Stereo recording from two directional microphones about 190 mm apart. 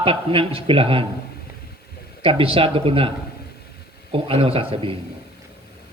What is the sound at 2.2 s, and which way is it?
Speech, 30° right (ahead or behind).